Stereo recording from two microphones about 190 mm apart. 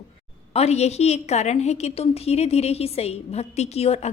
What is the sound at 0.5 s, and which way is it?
A woman's voice, 35° left (ahead or behind).